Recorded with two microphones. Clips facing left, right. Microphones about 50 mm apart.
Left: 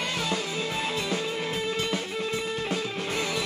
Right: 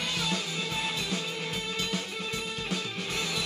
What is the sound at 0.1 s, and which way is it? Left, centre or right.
Music, left.